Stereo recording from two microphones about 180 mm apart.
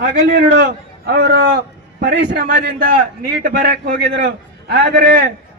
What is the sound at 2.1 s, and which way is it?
Speech, 80° right.